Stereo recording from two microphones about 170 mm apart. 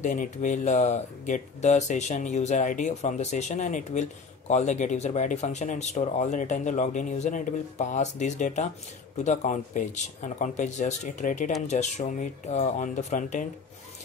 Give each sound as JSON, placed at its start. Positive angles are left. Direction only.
{"t": 0.0, "sound": "speech", "side_deg": 50}